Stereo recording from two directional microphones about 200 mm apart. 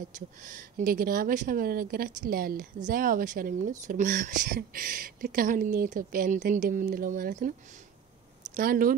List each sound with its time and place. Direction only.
0.4 s speech: 40° right (ahead or behind)
8.5 s speech: 45° right (ahead or behind)